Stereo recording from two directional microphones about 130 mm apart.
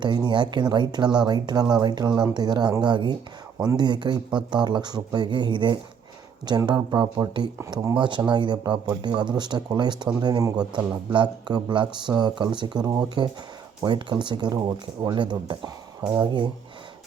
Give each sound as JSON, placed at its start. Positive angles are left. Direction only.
{"t": 0.0, "sound": "speech", "side_deg": -35}
{"t": 16.0, "sound": "speech", "side_deg": -20}
{"t": 16.2, "sound": "speech", "side_deg": -35}